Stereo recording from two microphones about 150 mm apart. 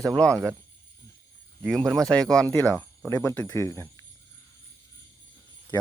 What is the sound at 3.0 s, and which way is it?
Speech, 20° left (ahead or behind).